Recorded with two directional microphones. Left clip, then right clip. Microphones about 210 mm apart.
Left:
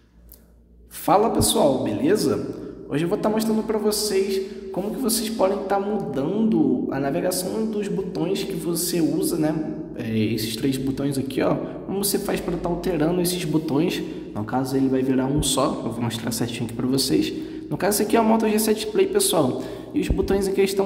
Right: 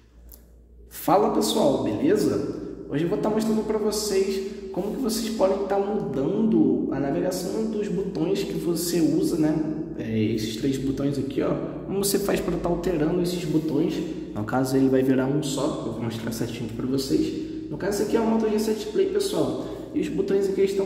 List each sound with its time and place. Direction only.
1.0 s a man's voice: 15° left (ahead or behind)
10.0 s a man's voice: 25° left (ahead or behind)
11.9 s a man's voice: 5° left (ahead or behind)
13.2 s speech: 30° left (ahead or behind)
14.5 s a man's voice: 5° left (ahead or behind)
15.4 s a man's voice: 25° left (ahead or behind)